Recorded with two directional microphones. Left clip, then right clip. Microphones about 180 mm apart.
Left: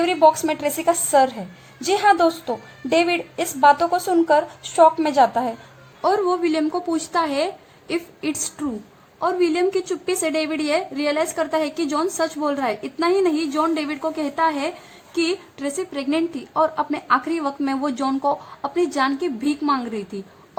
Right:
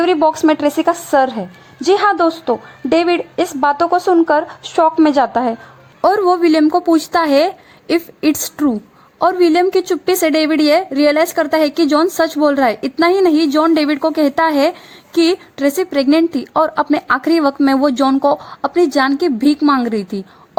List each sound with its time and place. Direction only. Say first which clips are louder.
0.0 s a woman's voice: right 3 dB; 20° right (ahead or behind)
6.0 s a woman's voice: right 7 dB; 40° right (ahead or behind)